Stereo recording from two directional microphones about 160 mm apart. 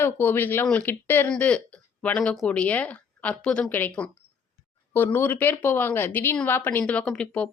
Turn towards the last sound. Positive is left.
turn(degrees=5)  # may be behind; listen again after turning